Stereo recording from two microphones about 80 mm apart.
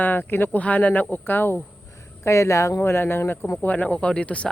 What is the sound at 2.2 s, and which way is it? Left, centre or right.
Speech, left.